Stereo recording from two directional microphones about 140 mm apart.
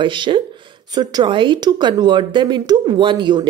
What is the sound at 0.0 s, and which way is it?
Speech, 35° right (ahead or behind).